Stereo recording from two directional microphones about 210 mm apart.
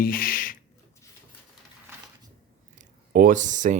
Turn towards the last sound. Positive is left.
turn(degrees=-35)  # may be behind; listen again after turning